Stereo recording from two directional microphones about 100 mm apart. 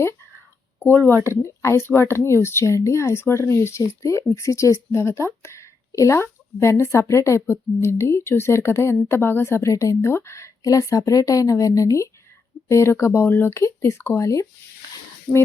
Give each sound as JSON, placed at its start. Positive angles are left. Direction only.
{"t": 0.8, "sound": "speech", "side_deg": 20}